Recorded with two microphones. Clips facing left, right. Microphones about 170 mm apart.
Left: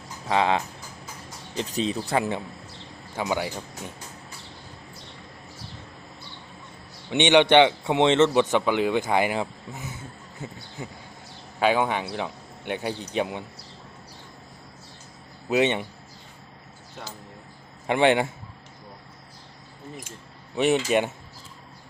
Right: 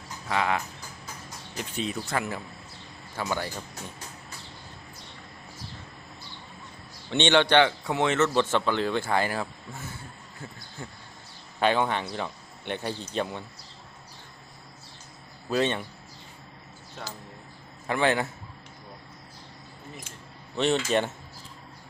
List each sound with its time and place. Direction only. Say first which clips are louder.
0.3 s speech: left 5 dB; 25° left (ahead or behind)
3.2 s speech: left 4 dB; 15° left (ahead or behind)
7.1 s speech: left 4 dB; 15° left (ahead or behind)
8.4 s speech: left 3 dB; 15° left (ahead or behind)
11.6 s speech: left 2 dB; 10° left (ahead or behind)
15.4 s speech: left 4 dB; 20° left (ahead or behind)
17.8 s speech: left 5 dB; 25° left (ahead or behind)
20.6 s speech: left 3 dB; 15° left (ahead or behind)